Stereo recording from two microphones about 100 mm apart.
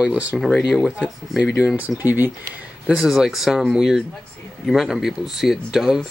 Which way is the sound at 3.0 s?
5° right (ahead or behind).